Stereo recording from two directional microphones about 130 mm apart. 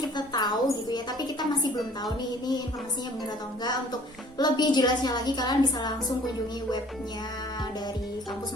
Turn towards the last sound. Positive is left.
turn(degrees=35)  # may be behind; listen again after turning